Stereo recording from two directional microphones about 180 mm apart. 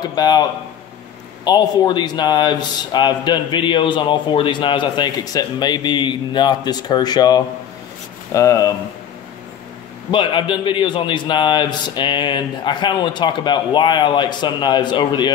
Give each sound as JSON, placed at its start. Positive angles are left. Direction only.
{"t": 0.1, "sound": "a man's voice", "side_deg": 20}
{"t": 10.1, "sound": "a man's voice", "side_deg": 25}